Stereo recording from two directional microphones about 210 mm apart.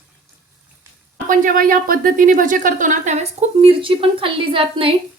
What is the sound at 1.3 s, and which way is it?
A woman's voice, 40° right (ahead or behind).